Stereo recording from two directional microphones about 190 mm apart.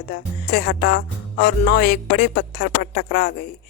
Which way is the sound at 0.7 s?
55° left (ahead or behind).